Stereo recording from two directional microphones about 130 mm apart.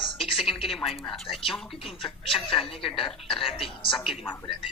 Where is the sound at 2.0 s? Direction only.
45° left (ahead or behind).